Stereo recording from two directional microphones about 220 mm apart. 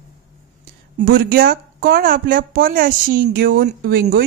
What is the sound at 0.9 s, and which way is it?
Speech, 45° right (ahead or behind).